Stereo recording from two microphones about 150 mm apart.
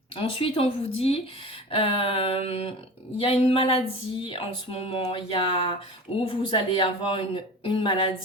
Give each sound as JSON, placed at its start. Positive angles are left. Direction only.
{"t": 0.2, "sound": "speech", "side_deg": 40}
{"t": 2.5, "sound": "a sound", "side_deg": 45}
{"t": 3.2, "sound": "speech", "side_deg": 40}